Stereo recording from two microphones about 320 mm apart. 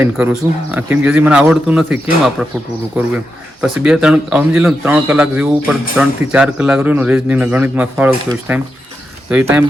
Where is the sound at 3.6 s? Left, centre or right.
Centre.